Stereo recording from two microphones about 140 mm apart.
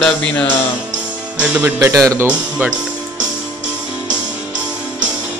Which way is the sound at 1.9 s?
25° right (ahead or behind).